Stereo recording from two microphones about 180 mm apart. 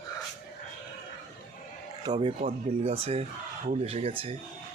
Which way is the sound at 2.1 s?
20° right (ahead or behind).